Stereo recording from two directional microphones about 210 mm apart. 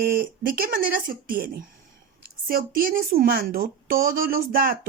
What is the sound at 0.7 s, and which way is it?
Speech, 45° right (ahead or behind).